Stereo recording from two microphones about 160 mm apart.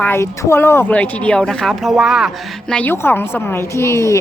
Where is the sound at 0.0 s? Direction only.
15° left (ahead or behind).